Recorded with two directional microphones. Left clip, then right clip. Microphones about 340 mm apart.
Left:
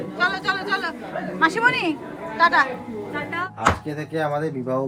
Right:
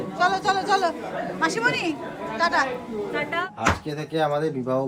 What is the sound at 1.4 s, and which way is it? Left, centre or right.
Speech, centre.